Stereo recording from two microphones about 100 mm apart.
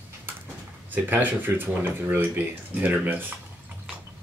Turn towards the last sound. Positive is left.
turn(degrees=-15)  # may be behind; listen again after turning